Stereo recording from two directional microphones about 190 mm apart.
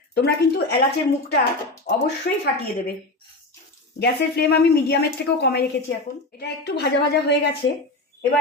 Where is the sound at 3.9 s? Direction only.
60° left (ahead or behind).